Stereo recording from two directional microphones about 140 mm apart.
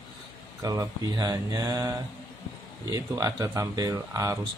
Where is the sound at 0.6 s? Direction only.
25° right (ahead or behind).